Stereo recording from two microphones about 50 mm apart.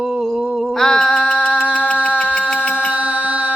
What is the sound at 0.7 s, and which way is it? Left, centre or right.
Mantra, centre.